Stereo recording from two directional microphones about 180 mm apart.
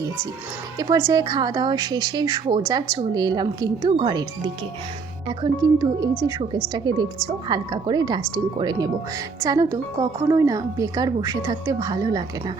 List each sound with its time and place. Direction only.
0.8 s speech: 15° right (ahead or behind)